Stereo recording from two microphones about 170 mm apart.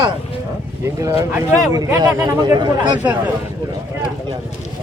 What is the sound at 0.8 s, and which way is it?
Speech, 20° right (ahead or behind).